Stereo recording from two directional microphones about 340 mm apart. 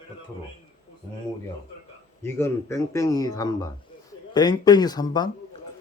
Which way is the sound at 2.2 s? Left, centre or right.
Centre.